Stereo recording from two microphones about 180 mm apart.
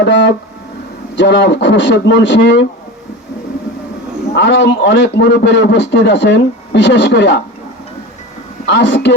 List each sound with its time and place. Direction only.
1.1 s a man's voice: 85° left
4.4 s a man's voice: 80° left
8.6 s speech: 75° left (ahead or behind)